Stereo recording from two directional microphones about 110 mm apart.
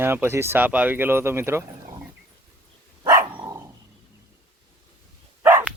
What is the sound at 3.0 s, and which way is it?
Dog, 25° right (ahead or behind).